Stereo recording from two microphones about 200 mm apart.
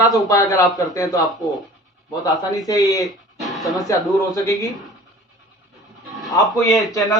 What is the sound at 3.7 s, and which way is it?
Speech, 15° left (ahead or behind).